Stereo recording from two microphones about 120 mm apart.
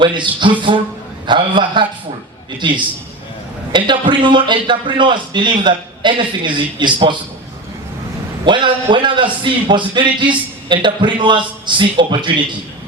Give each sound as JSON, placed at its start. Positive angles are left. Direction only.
{"t": 0.0, "sound": "a man's voice", "side_deg": -40}
{"t": 1.3, "sound": "a man's voice", "side_deg": -40}
{"t": 8.4, "sound": "a man's voice", "side_deg": -40}